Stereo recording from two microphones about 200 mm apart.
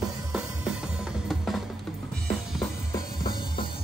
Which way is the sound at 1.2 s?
Centre (ahead or behind).